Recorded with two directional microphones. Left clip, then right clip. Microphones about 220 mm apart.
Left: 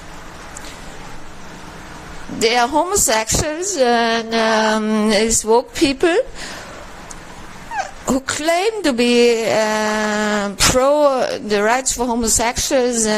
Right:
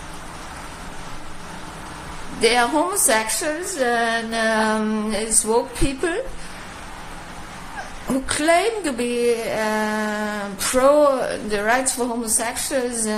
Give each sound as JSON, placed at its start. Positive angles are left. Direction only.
{"t": 2.4, "sound": "speech", "side_deg": 45}
{"t": 8.3, "sound": "speech", "side_deg": 45}